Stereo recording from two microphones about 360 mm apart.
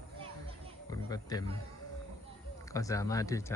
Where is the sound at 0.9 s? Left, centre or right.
Centre.